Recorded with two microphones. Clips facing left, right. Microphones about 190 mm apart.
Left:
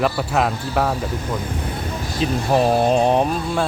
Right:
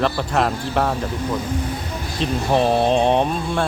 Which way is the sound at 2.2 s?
5° left (ahead or behind).